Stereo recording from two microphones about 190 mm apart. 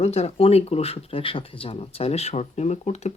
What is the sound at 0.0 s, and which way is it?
Speech, 35° left (ahead or behind).